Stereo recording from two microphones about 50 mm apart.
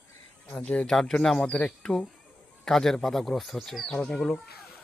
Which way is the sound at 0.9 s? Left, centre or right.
Centre.